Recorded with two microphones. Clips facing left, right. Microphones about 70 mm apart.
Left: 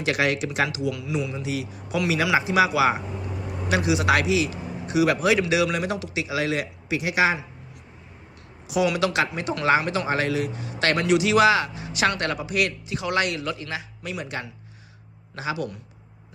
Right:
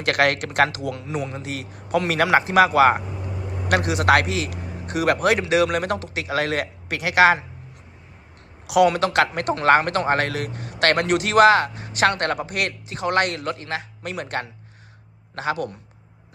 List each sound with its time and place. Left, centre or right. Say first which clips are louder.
0.0 s a man's voice: right 3 dB; right
8.6 s speech: right 6 dB; right
8.9 s speech: right 3 dB; right
9.2 s a man's voice: right 4 dB; right